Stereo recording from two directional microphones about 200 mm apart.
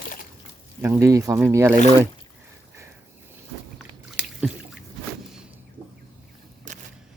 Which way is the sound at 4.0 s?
5° right (ahead or behind).